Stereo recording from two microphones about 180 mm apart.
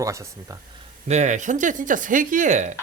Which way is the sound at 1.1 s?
40° right (ahead or behind).